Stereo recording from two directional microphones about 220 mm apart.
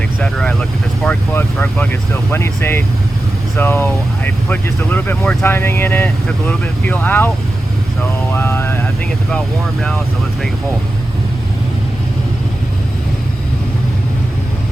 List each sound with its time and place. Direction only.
0.2 s speech: 5° left (ahead or behind)
8.3 s speech: 10° left (ahead or behind)